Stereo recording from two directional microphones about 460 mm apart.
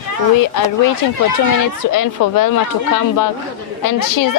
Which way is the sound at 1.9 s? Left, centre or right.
Left.